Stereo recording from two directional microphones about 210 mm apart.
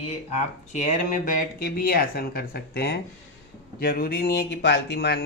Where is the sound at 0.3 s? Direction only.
35° left (ahead or behind).